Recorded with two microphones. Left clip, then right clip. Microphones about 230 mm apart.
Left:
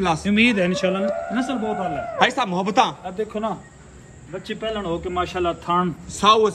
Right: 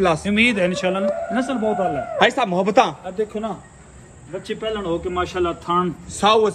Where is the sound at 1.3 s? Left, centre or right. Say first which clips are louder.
Right 3 dB; centre.